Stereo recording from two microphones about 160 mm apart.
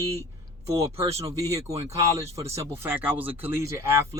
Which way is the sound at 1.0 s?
40° right (ahead or behind).